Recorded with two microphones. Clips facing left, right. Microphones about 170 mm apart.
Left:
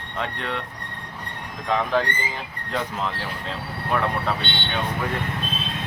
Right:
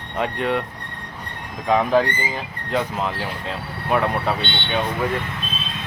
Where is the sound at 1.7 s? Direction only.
10° right (ahead or behind).